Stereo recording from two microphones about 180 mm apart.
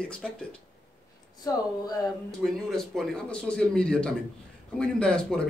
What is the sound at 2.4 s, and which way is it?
A man's voice, centre (ahead or behind).